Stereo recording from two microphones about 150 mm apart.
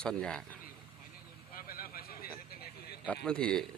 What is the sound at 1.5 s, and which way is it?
Vehicle, 75° left (ahead or behind).